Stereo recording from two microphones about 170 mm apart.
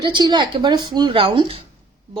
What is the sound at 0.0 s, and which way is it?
A woman's voice, 25° right (ahead or behind).